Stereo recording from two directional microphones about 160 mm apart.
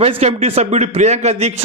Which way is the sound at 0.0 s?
40° right (ahead or behind).